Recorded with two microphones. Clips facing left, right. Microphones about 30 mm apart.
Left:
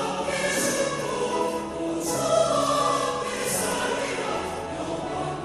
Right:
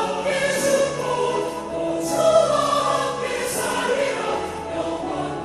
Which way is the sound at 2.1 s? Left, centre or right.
Right.